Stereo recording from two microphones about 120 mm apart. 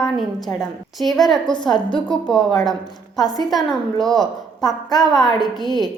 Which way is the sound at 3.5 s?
Centre (ahead or behind).